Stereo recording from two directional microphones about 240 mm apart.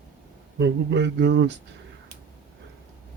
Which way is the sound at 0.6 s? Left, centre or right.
Right.